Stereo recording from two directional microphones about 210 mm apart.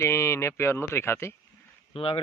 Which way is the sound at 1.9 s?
25° left (ahead or behind).